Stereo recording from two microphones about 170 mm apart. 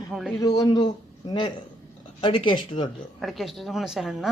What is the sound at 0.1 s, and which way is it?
Speech, centre (ahead or behind).